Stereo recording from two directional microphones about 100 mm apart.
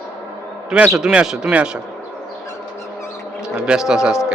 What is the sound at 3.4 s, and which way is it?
Speech, 10° right (ahead or behind).